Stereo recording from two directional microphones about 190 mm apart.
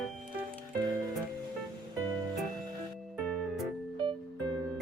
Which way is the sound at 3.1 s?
Centre (ahead or behind).